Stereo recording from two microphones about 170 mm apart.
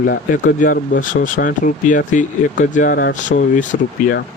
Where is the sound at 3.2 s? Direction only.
45° left (ahead or behind).